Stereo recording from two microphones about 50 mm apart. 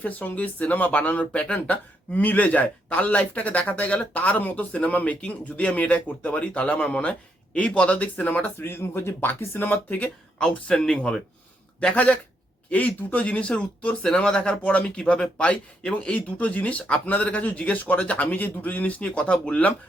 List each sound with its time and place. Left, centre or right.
0.0 s speech: left
1.5 s speech: left
8.5 s speech: left
10.0 s speech: centre
12.7 s speech: left